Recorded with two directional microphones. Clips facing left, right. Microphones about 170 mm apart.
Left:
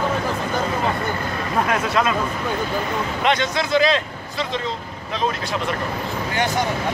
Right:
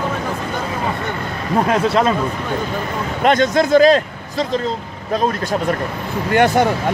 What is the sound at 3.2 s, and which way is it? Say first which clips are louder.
Speech: right 8 dB; 45° right (ahead or behind).